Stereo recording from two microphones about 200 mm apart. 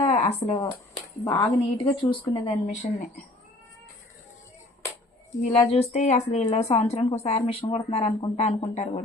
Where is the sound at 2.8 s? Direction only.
35° left (ahead or behind).